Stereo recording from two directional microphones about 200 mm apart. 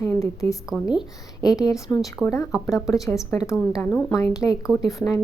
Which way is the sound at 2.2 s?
5° right (ahead or behind).